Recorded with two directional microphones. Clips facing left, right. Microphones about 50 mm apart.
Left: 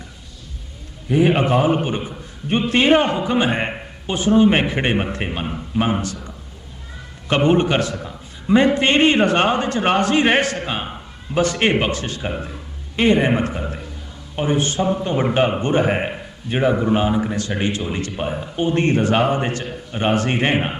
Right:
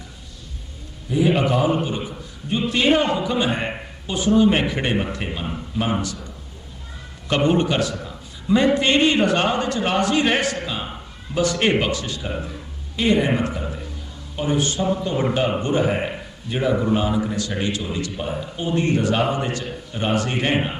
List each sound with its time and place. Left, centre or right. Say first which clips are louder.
1.0 s a man's voice: left 3 dB; left
7.3 s a man's voice: left 3 dB; left